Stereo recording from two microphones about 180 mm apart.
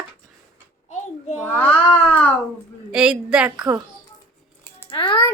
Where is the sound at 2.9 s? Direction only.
5° right (ahead or behind).